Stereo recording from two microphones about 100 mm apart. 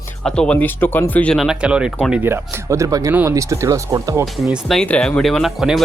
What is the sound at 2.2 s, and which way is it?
Speech, 25° right (ahead or behind).